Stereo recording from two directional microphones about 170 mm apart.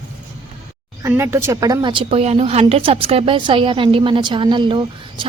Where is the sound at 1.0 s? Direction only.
15° right (ahead or behind).